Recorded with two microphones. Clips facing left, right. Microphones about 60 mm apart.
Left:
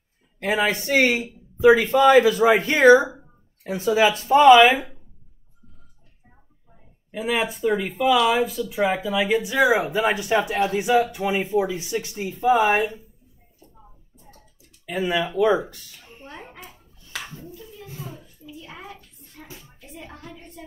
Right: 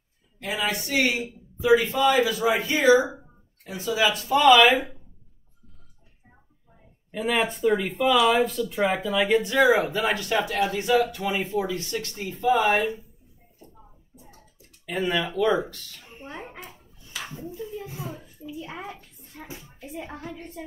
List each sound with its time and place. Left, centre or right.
0.4 s a man's voice: left
3.6 s a man's voice: left
7.1 s speech: centre
13.7 s a sound: centre
14.9 s speech: centre
15.3 s speech: centre
16.1 s a sound: centre
16.4 s dishes: centre
17.3 s a sound: right
19.4 s music: right
19.9 s speech: centre